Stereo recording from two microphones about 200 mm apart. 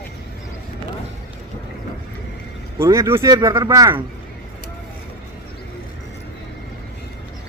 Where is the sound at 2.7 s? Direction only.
15° right (ahead or behind).